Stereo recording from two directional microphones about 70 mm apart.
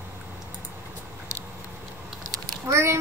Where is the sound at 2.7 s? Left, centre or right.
Right.